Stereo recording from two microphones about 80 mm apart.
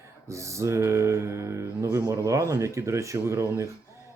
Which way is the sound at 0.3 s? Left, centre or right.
Right.